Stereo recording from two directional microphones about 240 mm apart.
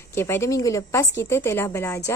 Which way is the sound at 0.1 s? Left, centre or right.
Centre.